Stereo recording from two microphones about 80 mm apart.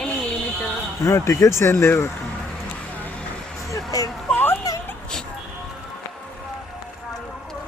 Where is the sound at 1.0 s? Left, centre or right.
Left.